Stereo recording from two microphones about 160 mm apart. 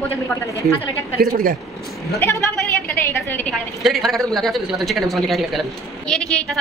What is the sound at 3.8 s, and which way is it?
A woman's voice, centre (ahead or behind).